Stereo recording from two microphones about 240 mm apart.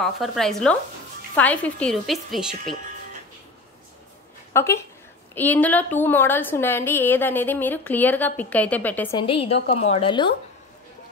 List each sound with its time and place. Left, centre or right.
0.0 s a woman's voice: centre
4.6 s a woman's voice: centre
9.2 s a woman's voice: left